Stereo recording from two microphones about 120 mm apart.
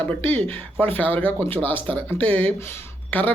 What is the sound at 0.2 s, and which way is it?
A woman's voice, 15° left (ahead or behind).